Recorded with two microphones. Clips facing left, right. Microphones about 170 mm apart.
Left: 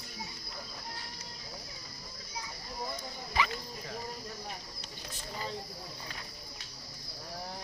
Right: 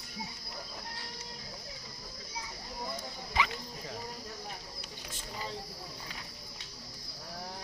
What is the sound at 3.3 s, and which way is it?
Cricket, 20° right (ahead or behind).